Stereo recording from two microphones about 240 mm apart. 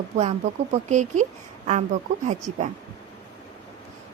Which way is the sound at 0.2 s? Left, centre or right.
Right.